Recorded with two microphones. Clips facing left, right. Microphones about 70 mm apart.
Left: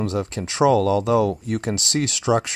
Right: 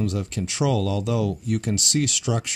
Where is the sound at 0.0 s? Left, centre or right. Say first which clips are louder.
Left 2 dB; left.